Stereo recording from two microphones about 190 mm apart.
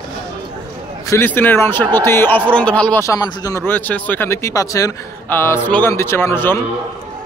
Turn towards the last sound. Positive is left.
turn(degrees=10)  # may be behind; listen again after turning